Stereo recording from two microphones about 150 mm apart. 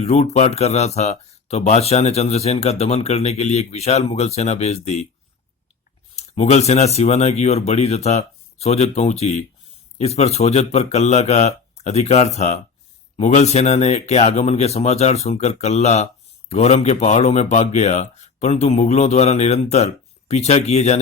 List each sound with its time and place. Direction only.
0.0 s speech: 45° left (ahead or behind)
6.1 s speech: 45° left (ahead or behind)